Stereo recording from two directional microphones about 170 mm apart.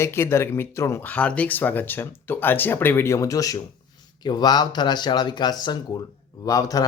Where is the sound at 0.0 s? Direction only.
15° left (ahead or behind).